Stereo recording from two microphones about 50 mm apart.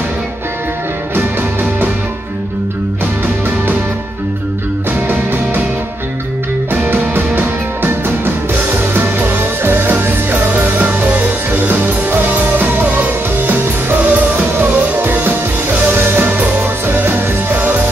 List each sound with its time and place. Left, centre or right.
1.1 s music: right
5.0 s music: right
6.7 s music: right
9.6 s music: right